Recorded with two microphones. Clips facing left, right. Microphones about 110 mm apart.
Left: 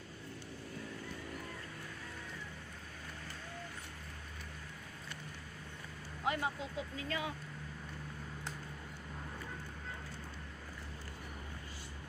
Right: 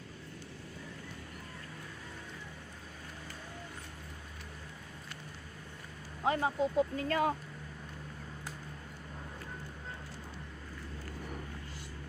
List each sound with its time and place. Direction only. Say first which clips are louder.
6.2 s speech: right 6 dB; 35° right (ahead or behind)
6.7 s speech: right 10 dB; 50° right (ahead or behind)